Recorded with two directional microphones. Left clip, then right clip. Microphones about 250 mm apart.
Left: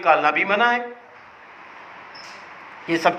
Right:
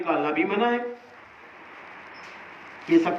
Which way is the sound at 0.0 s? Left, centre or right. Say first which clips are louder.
Left 7 dB; left.